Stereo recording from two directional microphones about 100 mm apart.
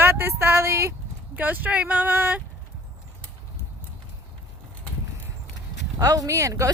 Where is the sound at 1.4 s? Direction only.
15° right (ahead or behind).